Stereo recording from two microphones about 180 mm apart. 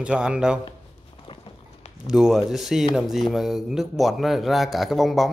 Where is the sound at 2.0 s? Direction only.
5° right (ahead or behind).